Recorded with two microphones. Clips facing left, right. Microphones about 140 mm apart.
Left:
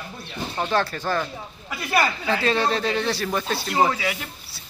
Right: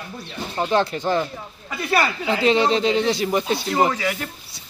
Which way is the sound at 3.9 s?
10° left (ahead or behind).